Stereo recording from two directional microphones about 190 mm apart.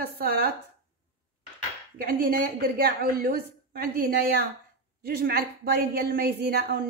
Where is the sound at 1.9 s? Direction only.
55° right (ahead or behind).